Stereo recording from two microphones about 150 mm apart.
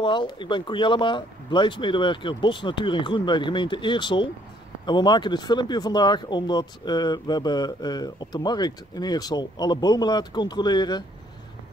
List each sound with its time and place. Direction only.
0.0 s speech: 30° left (ahead or behind)